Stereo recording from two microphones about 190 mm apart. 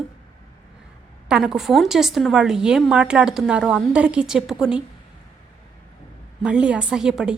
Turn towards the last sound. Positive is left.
turn(degrees=-5)  # may be behind; listen again after turning